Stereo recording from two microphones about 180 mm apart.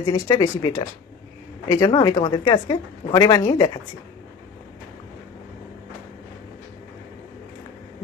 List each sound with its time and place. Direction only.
0.0 s a woman's voice: 20° left (ahead or behind)